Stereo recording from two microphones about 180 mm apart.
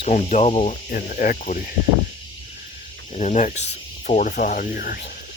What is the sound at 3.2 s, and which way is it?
Speech, 40° left (ahead or behind).